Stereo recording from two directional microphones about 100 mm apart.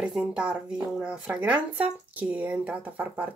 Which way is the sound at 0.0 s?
10° right (ahead or behind).